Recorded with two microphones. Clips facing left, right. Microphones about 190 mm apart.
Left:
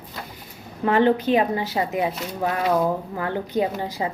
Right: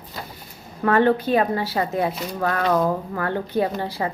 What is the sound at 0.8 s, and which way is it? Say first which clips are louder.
A woman's voice: even; 15° left (ahead or behind).